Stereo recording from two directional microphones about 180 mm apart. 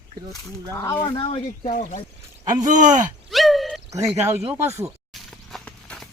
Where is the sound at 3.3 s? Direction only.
Centre (ahead or behind).